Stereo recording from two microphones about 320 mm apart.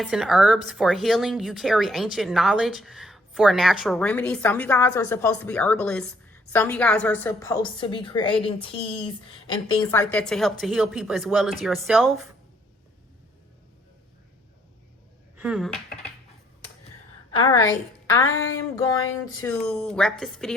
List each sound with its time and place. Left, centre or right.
0.0 s a woman's voice: centre
15.4 s speech: centre
17.3 s a woman's voice: centre
19.4 s a woman's voice: centre